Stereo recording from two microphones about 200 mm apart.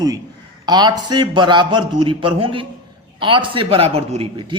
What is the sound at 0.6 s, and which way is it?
A man's voice, 20° right (ahead or behind).